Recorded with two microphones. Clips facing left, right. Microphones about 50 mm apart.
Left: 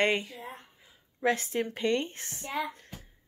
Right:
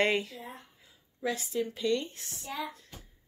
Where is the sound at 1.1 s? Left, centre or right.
Left.